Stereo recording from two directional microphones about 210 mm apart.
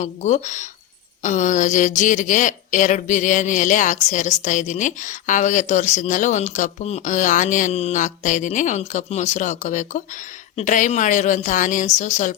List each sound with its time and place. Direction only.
0.0 s a woman's voice: 35° left (ahead or behind)